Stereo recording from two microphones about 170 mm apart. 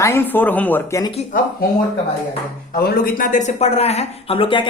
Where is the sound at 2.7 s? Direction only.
60° left (ahead or behind); by 4.6 s 30° left (ahead or behind).